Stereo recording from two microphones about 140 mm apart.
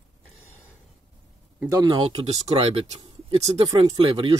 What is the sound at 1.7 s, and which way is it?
Speech, 30° right (ahead or behind).